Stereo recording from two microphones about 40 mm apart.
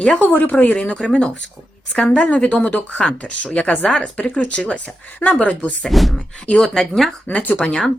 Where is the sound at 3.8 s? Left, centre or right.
Left.